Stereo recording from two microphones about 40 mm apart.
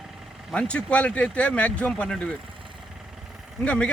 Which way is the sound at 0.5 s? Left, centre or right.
Left.